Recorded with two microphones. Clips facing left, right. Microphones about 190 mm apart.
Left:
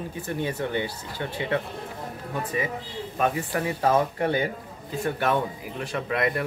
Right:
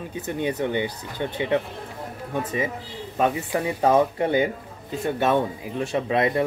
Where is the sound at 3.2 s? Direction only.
20° right (ahead or behind).